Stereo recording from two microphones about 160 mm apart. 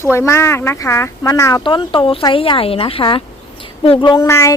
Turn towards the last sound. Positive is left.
turn(degrees=20)  # may be behind; listen again after turning